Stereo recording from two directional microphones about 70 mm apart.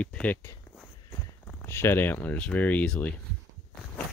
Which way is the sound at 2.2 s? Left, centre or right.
Left.